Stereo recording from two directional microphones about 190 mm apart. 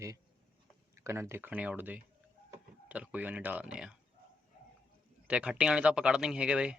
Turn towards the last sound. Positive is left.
turn(degrees=-5)  # may be behind; listen again after turning